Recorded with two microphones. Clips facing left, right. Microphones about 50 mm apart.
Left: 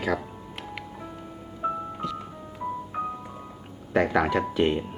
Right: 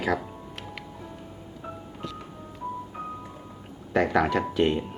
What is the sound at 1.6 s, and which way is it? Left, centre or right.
Music, left.